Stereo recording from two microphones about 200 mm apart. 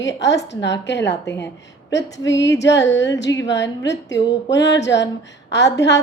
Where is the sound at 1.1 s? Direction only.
15° left (ahead or behind).